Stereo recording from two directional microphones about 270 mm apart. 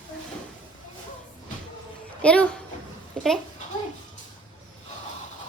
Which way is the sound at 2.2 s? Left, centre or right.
Centre.